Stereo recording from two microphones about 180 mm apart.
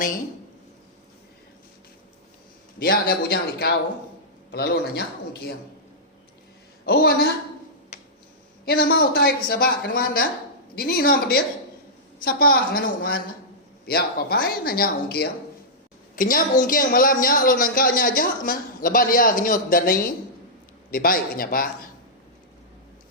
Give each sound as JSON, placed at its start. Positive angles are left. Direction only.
{"t": 2.7, "sound": "speech", "side_deg": 55}
{"t": 6.8, "sound": "speech", "side_deg": 60}
{"t": 8.6, "sound": "a woman's voice", "side_deg": 60}